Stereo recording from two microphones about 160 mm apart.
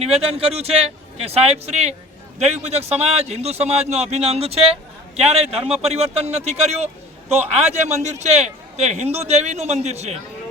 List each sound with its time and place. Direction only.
0.0 s a man's voice: 40° right (ahead or behind)